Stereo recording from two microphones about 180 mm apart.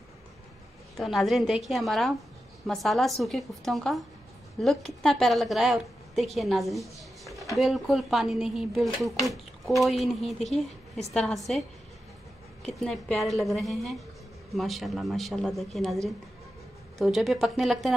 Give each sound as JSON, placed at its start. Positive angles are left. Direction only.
{"t": 0.9, "sound": "a woman's voice", "side_deg": 0}
{"t": 12.6, "sound": "speech", "side_deg": 0}
{"t": 17.0, "sound": "speech", "side_deg": 0}